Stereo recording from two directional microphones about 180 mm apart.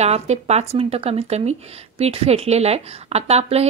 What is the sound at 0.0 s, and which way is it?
A woman's voice, 35° right (ahead or behind).